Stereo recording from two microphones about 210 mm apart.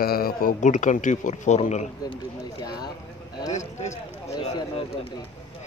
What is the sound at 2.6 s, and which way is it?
Speech, 20° left (ahead or behind).